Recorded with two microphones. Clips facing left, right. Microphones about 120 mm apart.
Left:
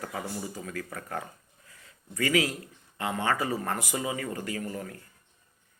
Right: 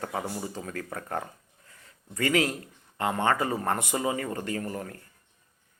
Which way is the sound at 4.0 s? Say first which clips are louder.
Right 3 dB; 35° right (ahead or behind).